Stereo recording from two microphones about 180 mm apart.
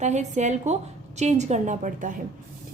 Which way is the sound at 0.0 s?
40° right (ahead or behind).